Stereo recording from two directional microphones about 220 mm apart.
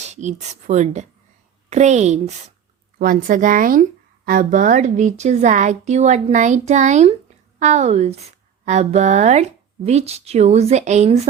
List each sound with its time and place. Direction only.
0.0 s a woman's voice: 30° right (ahead or behind)